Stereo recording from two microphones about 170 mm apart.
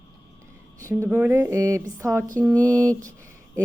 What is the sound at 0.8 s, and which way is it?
A woman's voice, 15° right (ahead or behind).